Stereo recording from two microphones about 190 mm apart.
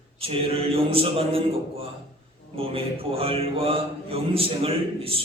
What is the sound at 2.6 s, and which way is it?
A man's voice, 30° right (ahead or behind).